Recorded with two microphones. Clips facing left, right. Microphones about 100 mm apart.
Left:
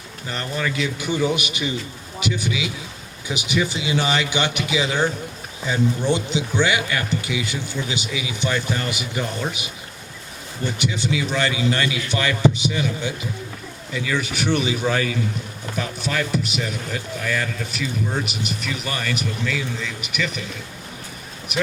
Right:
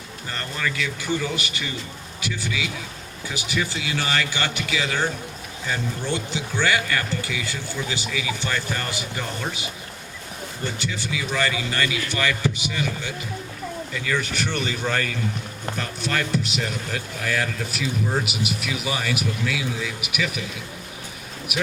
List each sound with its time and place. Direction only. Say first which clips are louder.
0.3 s speech: left 3 dB; 20° left (ahead or behind)
10.8 s speech: left 5 dB; 20° left (ahead or behind); by 20.4 s 5° right (ahead or behind)